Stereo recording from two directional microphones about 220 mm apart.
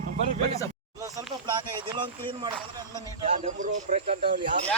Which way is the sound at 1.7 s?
20° right (ahead or behind).